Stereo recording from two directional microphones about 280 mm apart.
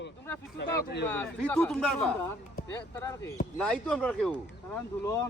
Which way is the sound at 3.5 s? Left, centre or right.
Centre.